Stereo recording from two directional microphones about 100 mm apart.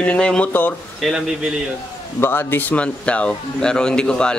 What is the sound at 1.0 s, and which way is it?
Speech, 5° right (ahead or behind).